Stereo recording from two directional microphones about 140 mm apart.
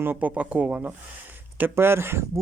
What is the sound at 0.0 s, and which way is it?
Speech, 15° right (ahead or behind).